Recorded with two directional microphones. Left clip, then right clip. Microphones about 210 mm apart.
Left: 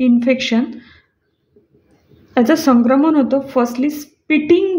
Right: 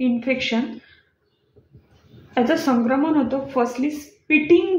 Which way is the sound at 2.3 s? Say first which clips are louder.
Left 6 dB; 55° left (ahead or behind).